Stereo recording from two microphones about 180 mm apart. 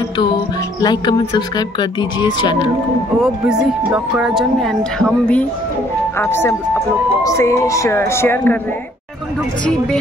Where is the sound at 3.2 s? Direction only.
5° right (ahead or behind); by 8.6 s 10° left (ahead or behind).